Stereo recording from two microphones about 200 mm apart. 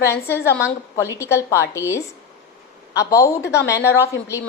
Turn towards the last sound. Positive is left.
turn(degrees=15)  # may be behind; listen again after turning